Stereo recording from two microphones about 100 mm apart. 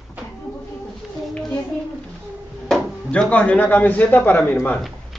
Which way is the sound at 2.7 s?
10° left (ahead or behind).